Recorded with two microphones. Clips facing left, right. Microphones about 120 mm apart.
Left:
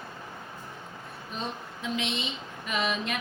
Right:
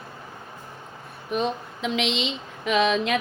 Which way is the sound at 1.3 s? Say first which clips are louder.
Right 11 dB; 90° right.